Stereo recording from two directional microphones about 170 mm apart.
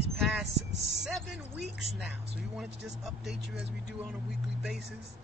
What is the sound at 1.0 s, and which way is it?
Vehicle, 5° right (ahead or behind).